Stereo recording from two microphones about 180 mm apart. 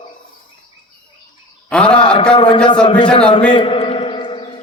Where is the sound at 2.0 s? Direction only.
25° left (ahead or behind).